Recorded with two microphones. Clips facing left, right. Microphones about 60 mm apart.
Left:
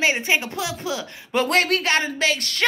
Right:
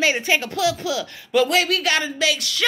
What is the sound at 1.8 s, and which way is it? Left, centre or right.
Speech, left.